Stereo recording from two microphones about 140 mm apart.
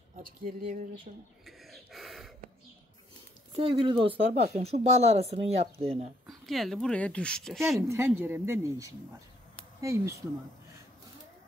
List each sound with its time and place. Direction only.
0.4 s speech: 90° right
1.1 s speech: 55° right (ahead or behind)
1.4 s a sound: centre (ahead or behind)
3.5 s speech: 40° right (ahead or behind)
4.6 s speech: 50° right (ahead or behind)
6.2 s speech: centre (ahead or behind)
7.9 s speech: 15° right (ahead or behind)